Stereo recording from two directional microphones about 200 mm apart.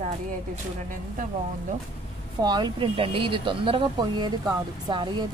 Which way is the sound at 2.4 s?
20° right (ahead or behind).